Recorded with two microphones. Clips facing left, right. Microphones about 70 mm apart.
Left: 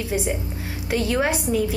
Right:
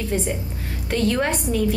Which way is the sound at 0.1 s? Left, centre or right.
Centre.